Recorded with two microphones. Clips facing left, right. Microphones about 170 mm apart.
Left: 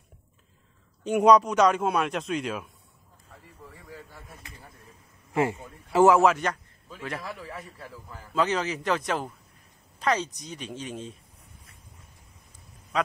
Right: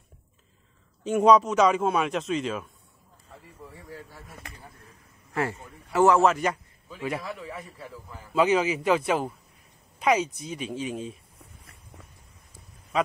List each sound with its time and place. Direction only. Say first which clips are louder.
1.0 s speech: even; centre (ahead or behind)
5.3 s a man's voice: left 3 dB; 20° left (ahead or behind)
6.2 s a man's voice: even; centre (ahead or behind)
12.9 s a sound: right 2 dB; centre (ahead or behind)